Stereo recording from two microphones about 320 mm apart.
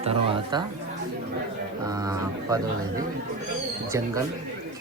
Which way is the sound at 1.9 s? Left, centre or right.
Centre.